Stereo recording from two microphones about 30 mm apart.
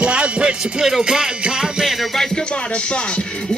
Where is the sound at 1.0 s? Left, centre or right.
Right.